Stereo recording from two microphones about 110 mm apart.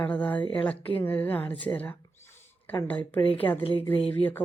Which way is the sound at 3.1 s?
55° left (ahead or behind).